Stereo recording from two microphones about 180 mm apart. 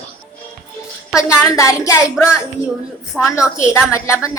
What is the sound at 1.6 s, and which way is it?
Speech, 15° left (ahead or behind).